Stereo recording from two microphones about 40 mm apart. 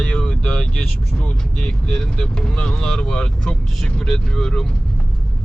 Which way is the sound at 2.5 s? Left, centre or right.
Left.